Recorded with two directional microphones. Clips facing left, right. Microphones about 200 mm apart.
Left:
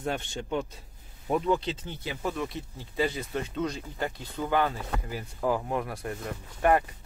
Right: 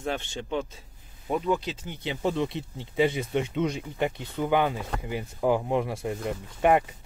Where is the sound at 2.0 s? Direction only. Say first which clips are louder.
Right 5 dB; 25° right (ahead or behind).